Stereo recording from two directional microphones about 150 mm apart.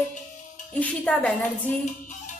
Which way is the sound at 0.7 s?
10° left (ahead or behind).